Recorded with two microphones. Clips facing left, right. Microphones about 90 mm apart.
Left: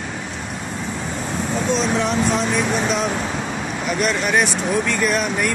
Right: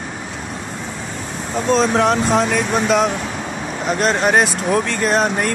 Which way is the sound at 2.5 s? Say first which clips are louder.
Right 3 dB; 60° right (ahead or behind).